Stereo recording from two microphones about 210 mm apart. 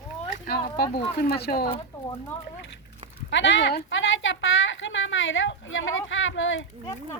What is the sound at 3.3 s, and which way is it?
A woman's voice, 60° left (ahead or behind).